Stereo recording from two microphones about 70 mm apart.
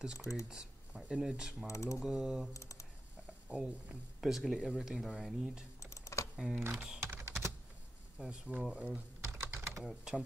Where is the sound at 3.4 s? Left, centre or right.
Centre.